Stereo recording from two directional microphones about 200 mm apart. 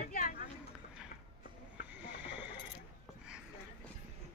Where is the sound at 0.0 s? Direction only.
40° left (ahead or behind).